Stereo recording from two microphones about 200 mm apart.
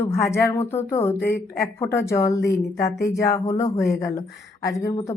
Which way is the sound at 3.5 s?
15° left (ahead or behind).